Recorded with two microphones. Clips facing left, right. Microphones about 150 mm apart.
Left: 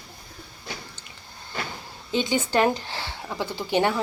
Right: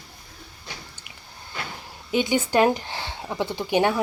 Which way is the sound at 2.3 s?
15° right (ahead or behind).